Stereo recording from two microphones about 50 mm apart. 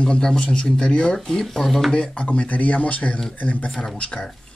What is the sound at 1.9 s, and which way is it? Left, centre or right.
Speech, centre.